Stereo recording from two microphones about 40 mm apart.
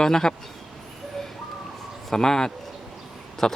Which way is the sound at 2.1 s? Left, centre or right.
Centre.